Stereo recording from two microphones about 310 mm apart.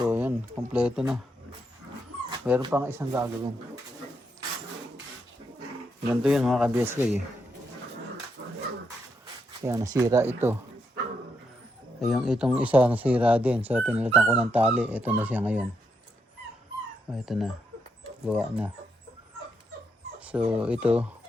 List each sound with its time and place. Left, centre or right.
0.0 s speech: centre
2.3 s speech: centre
6.1 s speech: centre
8.4 s dog: right
9.6 s speech: centre
11.9 s speech: centre
17.1 s speech: centre
20.1 s speech: centre